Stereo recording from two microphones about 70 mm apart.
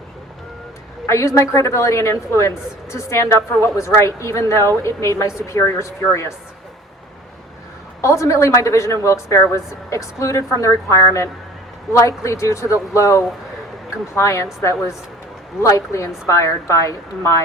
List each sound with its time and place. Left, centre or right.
1.0 s a woman's voice: left
8.0 s a woman's voice: left